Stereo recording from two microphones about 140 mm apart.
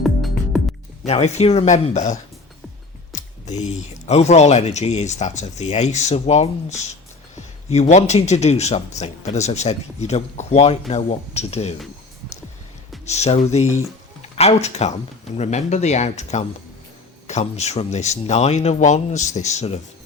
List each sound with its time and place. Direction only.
0.0 s music: centre (ahead or behind)
1.0 s speech: 50° left (ahead or behind)
3.6 s speech: 55° left (ahead or behind)
13.1 s speech: 50° left (ahead or behind)